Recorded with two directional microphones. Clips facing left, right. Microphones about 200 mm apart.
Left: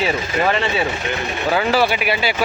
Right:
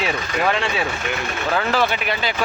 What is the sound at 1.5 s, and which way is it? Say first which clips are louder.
Speech: left 3 dB; 5° left (ahead or behind).